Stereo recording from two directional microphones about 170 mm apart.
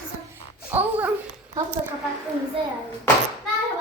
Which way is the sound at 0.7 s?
10° right (ahead or behind).